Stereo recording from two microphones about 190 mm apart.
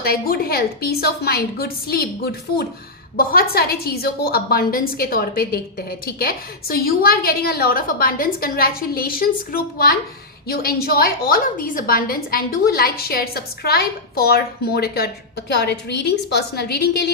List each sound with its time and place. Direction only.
0.0 s a woman's voice: 50° left (ahead or behind)